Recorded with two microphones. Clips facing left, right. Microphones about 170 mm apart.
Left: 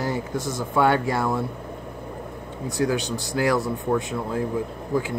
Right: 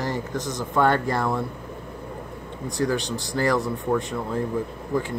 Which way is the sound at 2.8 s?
5° left (ahead or behind).